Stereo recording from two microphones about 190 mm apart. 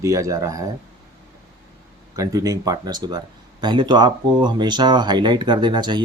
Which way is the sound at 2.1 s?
20° right (ahead or behind).